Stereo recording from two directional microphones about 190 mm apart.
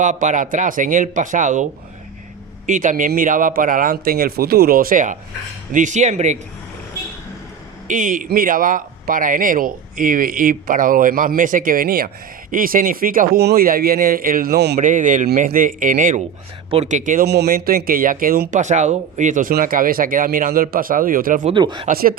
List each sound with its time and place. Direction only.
0.0 s speech: 40° right (ahead or behind)
2.6 s speech: 40° right (ahead or behind)
7.9 s speech: 45° right (ahead or behind); by 14.8 s 60° right (ahead or behind)
14.8 s speech: 45° right (ahead or behind)
16.6 s speech: 35° right (ahead or behind)
17.2 s speech: 60° right (ahead or behind)
21.4 s speech: 25° right (ahead or behind)
21.8 s speech: 50° right (ahead or behind)